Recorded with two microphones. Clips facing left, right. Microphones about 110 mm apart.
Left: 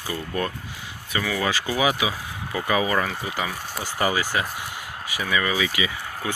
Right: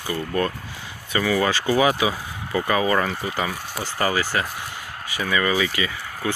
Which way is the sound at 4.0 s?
15° left (ahead or behind).